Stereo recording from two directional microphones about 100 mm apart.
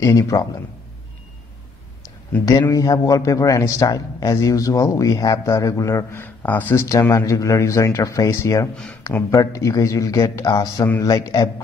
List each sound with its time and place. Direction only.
0.0 s a man's voice: 35° left (ahead or behind)
2.7 s a man's voice: 35° left (ahead or behind)
6.1 s a man's voice: 15° left (ahead or behind)
6.8 s a man's voice: 35° left (ahead or behind)
10.5 s a man's voice: 40° left (ahead or behind)